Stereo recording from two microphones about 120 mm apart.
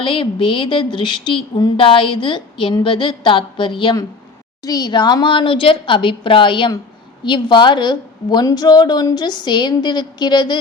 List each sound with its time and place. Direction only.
0.0 s a woman's voice: 50° left (ahead or behind)
4.6 s a woman's voice: 30° left (ahead or behind)